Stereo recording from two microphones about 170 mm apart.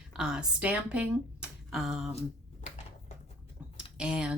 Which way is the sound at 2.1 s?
40° left (ahead or behind).